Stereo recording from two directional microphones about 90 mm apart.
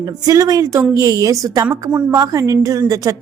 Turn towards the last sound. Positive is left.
turn(degrees=-40)  # may be behind; listen again after turning